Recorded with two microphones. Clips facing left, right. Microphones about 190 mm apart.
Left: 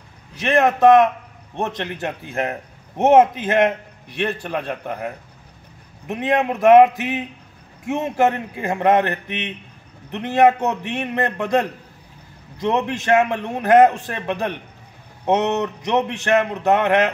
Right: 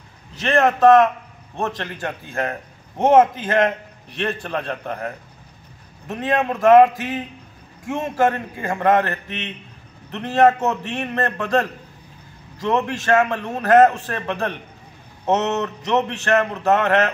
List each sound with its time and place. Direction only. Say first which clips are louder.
0.5 s a man's voice: even; 15° left (ahead or behind)
12.6 s a man's voice: left 1 dB; 20° left (ahead or behind)